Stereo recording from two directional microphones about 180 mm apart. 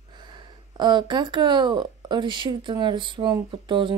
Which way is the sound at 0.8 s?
25° right (ahead or behind).